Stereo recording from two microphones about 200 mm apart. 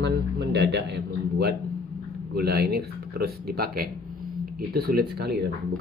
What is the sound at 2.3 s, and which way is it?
Speech, 50° right (ahead or behind).